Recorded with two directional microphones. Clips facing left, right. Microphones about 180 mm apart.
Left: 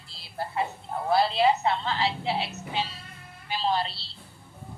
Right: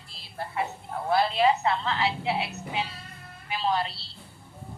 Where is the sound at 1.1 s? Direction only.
30° left (ahead or behind).